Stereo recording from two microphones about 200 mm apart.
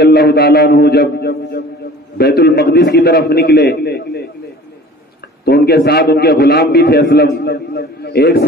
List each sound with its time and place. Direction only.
0.0 s a man's voice: 55° left (ahead or behind)
5.4 s a man's voice: 50° left (ahead or behind)